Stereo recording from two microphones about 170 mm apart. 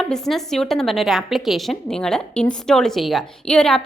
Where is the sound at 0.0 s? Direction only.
Centre (ahead or behind).